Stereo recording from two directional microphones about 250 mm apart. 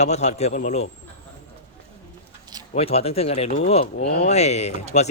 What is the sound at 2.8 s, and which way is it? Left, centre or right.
Speech, left.